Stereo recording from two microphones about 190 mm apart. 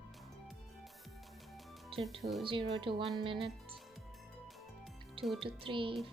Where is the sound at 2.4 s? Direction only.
25° right (ahead or behind).